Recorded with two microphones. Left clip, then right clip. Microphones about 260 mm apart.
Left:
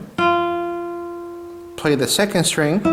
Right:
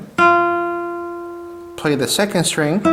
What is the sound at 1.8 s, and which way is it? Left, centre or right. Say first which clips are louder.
Speech: even; centre.